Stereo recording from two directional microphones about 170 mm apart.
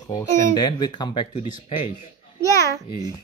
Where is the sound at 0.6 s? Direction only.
25° left (ahead or behind).